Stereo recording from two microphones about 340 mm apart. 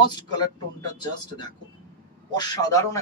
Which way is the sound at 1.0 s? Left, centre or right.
Centre.